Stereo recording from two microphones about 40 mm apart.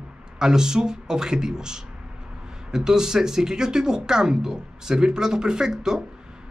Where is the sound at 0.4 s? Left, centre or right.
Centre.